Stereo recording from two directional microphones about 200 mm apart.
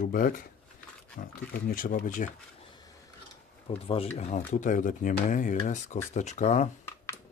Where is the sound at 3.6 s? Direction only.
30° left (ahead or behind).